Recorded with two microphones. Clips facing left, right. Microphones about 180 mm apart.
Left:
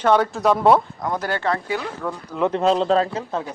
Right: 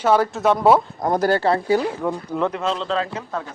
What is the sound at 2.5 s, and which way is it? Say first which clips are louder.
Speech: left 5 dB; 40° left (ahead or behind).